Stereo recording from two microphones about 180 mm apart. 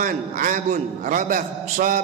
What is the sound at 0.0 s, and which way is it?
A man's voice, 50° right (ahead or behind).